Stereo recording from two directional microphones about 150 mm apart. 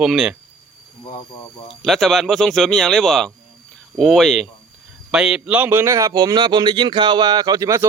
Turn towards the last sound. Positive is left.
turn(degrees=-20)  # may be behind; listen again after turning